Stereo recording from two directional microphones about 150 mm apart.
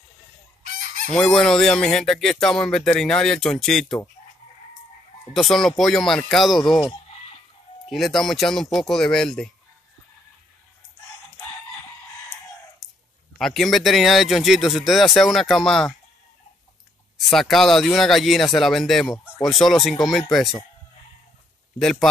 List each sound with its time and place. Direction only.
0.7 s fowl: 60° right (ahead or behind)
1.1 s speech: 5° left (ahead or behind)
5.3 s speech: centre (ahead or behind)
7.9 s speech: centre (ahead or behind)
12.8 s a sound: centre (ahead or behind)
13.4 s speech: centre (ahead or behind)
17.3 s speech: centre (ahead or behind)
21.7 s speech: 5° left (ahead or behind)